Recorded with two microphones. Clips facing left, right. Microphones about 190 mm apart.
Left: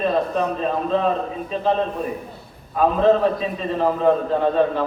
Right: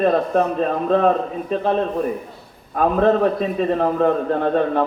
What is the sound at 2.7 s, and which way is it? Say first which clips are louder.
A man's voice: even; 55° right (ahead or behind).